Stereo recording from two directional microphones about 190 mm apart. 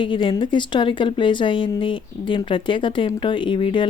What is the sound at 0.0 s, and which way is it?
Speech, 25° left (ahead or behind).